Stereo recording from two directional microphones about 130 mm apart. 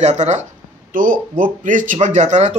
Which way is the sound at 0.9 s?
90° right.